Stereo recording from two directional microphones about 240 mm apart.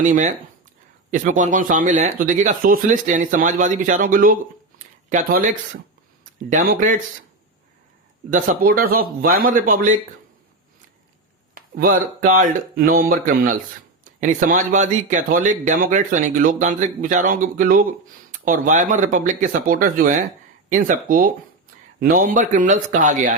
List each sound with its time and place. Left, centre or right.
0.0 s speech: right
8.3 s speech: right
11.5 s speech: right